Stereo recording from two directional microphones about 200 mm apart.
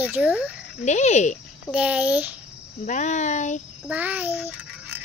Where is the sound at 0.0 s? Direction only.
5° right (ahead or behind).